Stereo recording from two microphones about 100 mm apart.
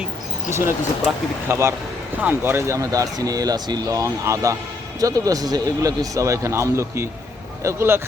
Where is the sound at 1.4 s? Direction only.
30° right (ahead or behind).